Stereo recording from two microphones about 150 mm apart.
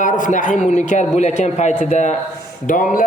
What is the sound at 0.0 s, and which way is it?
A man's voice, 55° left (ahead or behind).